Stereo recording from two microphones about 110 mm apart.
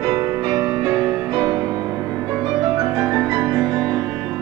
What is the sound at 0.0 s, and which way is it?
Music, 35° right (ahead or behind).